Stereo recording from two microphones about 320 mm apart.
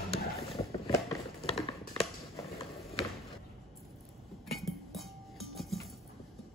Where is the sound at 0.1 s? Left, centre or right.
Centre.